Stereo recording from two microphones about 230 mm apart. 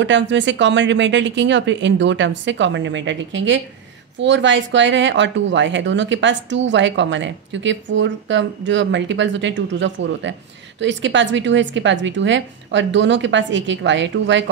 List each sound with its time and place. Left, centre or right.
0.0 s speech: right